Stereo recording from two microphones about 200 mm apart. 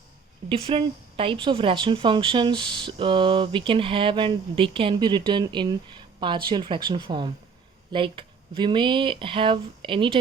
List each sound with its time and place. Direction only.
0.4 s speech: 25° right (ahead or behind)